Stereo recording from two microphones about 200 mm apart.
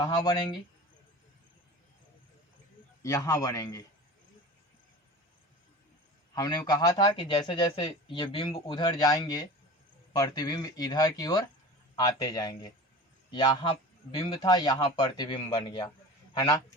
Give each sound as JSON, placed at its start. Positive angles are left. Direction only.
{"t": 0.0, "sound": "a man's voice", "side_deg": 20}
{"t": 3.0, "sound": "a man's voice", "side_deg": 15}
{"t": 6.3, "sound": "a man's voice", "side_deg": 20}